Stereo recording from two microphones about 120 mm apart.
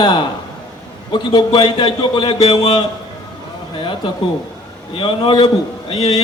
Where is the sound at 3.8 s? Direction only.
45° left (ahead or behind).